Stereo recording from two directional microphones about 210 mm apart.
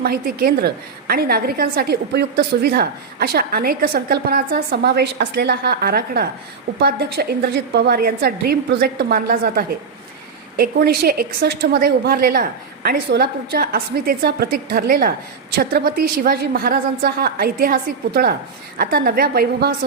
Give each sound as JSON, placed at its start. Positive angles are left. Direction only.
{"t": 0.0, "sound": "a woman's voice", "side_deg": -45}